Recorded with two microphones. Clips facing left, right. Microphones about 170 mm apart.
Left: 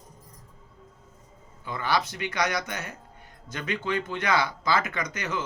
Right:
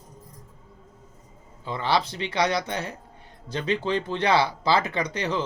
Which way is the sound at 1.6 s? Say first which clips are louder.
Right 3 dB; 30° right (ahead or behind).